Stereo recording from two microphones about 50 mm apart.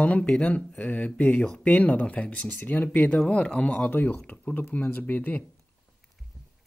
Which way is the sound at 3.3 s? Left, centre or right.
Left.